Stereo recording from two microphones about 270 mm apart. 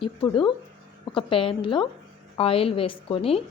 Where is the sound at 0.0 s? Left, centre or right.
Centre.